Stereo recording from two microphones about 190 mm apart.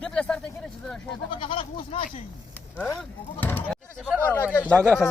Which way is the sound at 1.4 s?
30° left (ahead or behind).